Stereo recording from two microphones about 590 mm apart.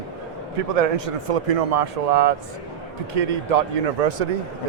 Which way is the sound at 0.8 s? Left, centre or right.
Right.